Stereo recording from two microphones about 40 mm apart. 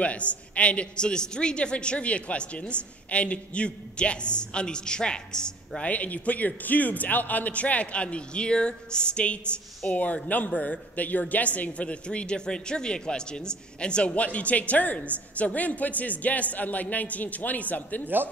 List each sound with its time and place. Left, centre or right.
0.0 s a woman's voice: left
5.8 s speech: left
18.0 s a man's voice: right